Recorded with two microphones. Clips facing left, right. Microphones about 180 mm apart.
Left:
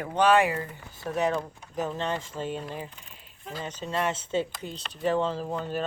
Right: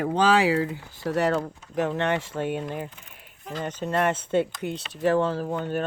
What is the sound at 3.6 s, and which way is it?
Speech, 55° right (ahead or behind).